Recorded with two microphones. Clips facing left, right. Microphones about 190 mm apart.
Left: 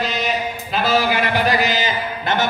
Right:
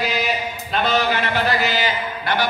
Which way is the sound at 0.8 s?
10° left (ahead or behind).